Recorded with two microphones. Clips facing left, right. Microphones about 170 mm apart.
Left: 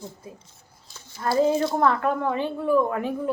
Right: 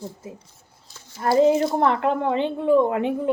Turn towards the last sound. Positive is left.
turn(degrees=-25)  # may be behind; listen again after turning